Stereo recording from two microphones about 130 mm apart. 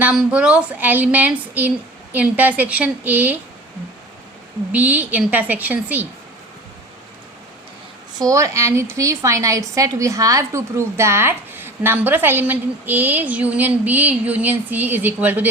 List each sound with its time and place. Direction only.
0.0 s a woman's voice: 10° right (ahead or behind)
4.7 s a woman's voice: 10° right (ahead or behind)
8.2 s a woman's voice: 25° right (ahead or behind)